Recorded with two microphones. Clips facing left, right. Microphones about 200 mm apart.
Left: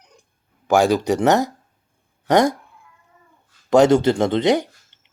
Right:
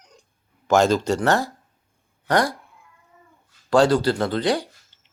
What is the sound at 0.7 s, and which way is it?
Speech, 15° left (ahead or behind).